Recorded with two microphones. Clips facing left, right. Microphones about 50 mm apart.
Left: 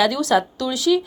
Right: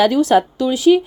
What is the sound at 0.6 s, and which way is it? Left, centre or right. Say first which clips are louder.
Speech: right 6 dB; right.